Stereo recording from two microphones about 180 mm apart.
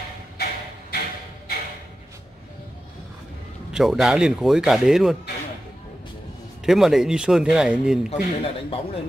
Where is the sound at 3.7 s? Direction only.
Centre (ahead or behind).